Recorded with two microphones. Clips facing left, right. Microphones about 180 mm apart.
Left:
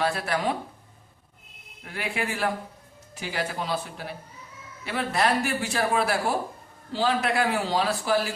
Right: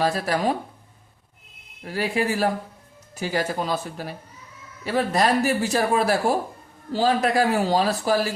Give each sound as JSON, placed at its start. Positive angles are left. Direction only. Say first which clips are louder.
{"t": 0.0, "sound": "a man's voice", "louder": "right 4 dB", "side_deg": -35}
{"t": 1.8, "sound": "a man's voice", "louder": "right 7 dB", "side_deg": -35}